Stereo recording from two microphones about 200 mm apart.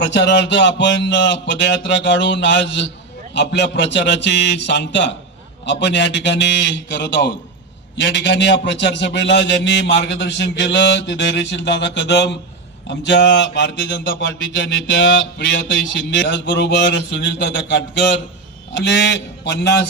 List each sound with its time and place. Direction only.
0.0 s mantra: 60° left (ahead or behind)